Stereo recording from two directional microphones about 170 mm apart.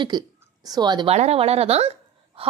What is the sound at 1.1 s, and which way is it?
Speech, 40° right (ahead or behind).